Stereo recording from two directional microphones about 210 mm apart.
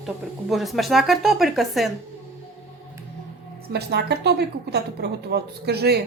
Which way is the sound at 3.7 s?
50° right (ahead or behind).